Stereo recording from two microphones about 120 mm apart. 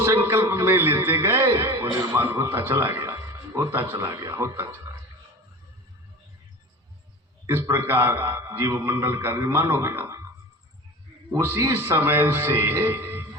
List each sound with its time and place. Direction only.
0.0 s a man's voice: 20° right (ahead or behind)
7.4 s a man's voice: 20° right (ahead or behind)
11.3 s a man's voice: 20° right (ahead or behind)